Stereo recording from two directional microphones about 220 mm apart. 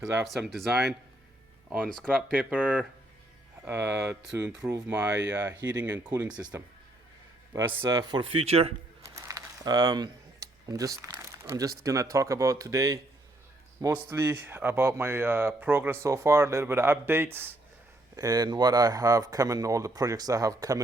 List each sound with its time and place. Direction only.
0.3 s speech: centre (ahead or behind)
1.9 s speech: 5° left (ahead or behind); by 8.7 s 25° right (ahead or behind)
9.0 s speech: 15° right (ahead or behind)